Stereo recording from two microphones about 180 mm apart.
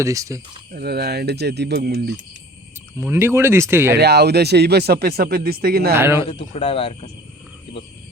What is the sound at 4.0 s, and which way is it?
Speech, 65° right (ahead or behind).